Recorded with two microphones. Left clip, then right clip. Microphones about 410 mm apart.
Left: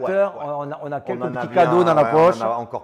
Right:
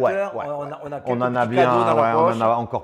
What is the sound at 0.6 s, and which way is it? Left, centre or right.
Speech, left.